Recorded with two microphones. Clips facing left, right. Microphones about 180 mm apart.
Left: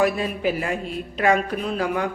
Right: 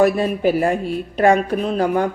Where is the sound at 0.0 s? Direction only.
45° right (ahead or behind).